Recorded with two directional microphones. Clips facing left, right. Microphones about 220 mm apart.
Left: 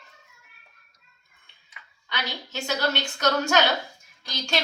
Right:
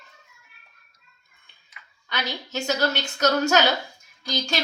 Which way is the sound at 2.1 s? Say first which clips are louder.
Right 3 dB; 45° right (ahead or behind).